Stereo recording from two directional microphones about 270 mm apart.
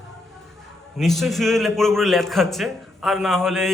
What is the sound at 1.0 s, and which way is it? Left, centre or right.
A man's voice, centre.